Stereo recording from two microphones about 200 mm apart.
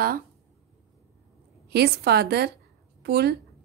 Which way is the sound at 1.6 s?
55° right (ahead or behind).